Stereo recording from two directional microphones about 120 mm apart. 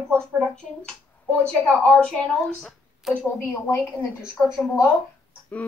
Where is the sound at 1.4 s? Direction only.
5° left (ahead or behind).